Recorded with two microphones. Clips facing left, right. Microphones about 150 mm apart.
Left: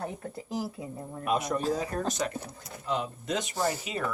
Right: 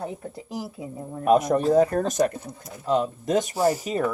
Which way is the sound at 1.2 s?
50° right (ahead or behind).